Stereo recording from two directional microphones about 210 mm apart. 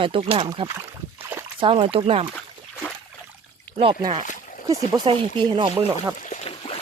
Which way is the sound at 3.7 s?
25° right (ahead or behind).